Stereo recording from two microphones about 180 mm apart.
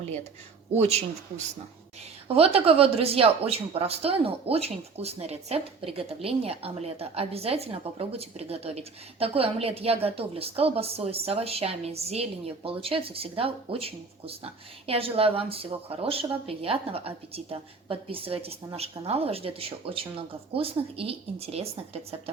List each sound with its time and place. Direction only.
0.8 s a woman's voice: 35° right (ahead or behind)